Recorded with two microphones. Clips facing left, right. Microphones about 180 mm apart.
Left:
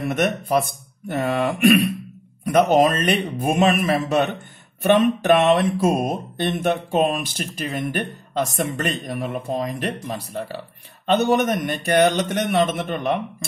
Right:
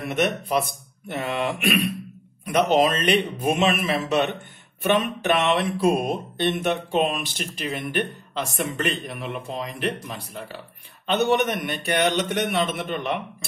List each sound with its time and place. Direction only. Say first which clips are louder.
0.0 s speech: left 2 dB; 45° left (ahead or behind)